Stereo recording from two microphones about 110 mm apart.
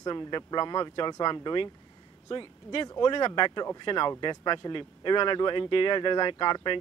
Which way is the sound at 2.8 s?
35° left (ahead or behind).